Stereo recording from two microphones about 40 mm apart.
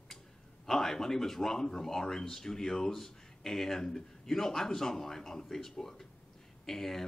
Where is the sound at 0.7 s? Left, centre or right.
Centre.